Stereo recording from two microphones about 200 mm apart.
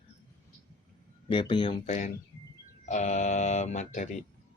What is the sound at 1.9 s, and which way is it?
Speech, 35° left (ahead or behind).